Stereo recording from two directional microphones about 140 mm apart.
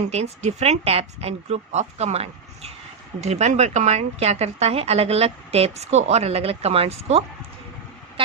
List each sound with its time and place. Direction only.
0.1 s a woman's voice: 50° right (ahead or behind)